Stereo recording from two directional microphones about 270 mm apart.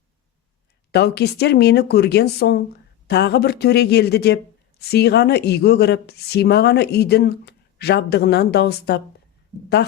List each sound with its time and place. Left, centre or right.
0.9 s speech: left